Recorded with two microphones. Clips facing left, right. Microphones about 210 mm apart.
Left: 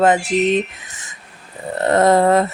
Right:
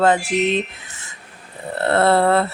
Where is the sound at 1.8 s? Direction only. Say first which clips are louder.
Left 2 dB; 15° left (ahead or behind).